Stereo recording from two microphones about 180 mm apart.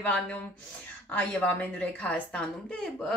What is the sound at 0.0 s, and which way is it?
A woman's voice, 10° left (ahead or behind).